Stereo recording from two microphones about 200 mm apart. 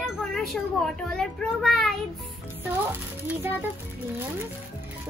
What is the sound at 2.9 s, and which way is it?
Speech, 10° right (ahead or behind).